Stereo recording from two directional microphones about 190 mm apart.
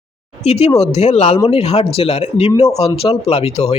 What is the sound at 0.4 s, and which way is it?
Speech, 35° left (ahead or behind).